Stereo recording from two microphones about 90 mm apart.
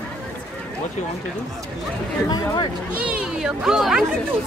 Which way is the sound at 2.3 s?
45° left (ahead or behind).